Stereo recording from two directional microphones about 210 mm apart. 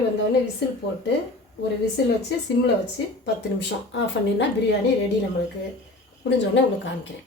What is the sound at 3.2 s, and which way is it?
Speech, 60° left (ahead or behind).